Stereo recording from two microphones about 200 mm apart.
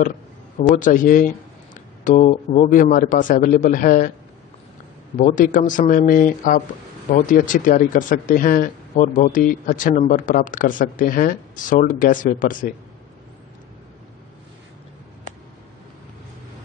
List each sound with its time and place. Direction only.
0.6 s speech: 40° left (ahead or behind)
5.1 s speech: 40° left (ahead or behind)